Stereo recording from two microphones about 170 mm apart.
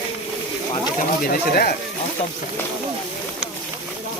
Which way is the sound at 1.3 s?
60° left (ahead or behind).